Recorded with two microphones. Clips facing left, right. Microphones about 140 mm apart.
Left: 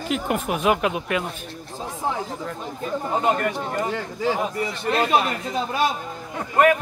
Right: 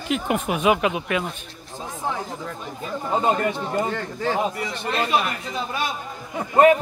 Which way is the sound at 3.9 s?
5° left (ahead or behind).